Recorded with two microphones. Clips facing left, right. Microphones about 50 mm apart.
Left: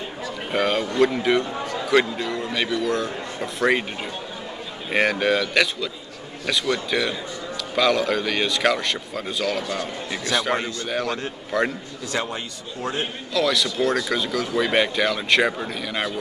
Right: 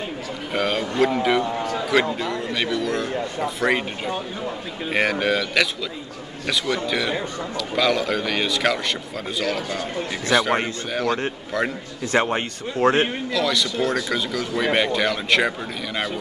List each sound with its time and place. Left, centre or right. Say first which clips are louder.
0.5 s speech: left 1 dB; centre
4.9 s speech: left 1 dB; centre
12.1 s a man's voice: right 7 dB; right
13.3 s speech: even; centre